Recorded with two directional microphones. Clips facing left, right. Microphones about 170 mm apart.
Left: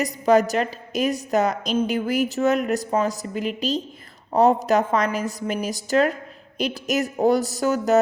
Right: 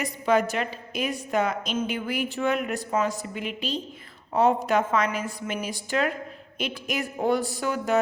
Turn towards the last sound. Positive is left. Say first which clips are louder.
# left 6 dB
turn(degrees=40)  # may be behind; listen again after turning